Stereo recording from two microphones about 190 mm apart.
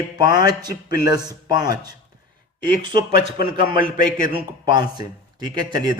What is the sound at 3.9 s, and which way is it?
Speech, 45° left (ahead or behind).